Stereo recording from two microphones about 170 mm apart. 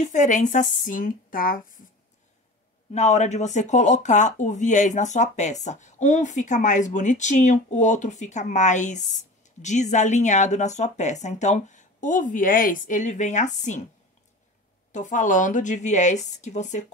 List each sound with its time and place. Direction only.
0.0 s speech: 50° left (ahead or behind)
2.9 s speech: 40° left (ahead or behind)
14.9 s speech: 45° left (ahead or behind)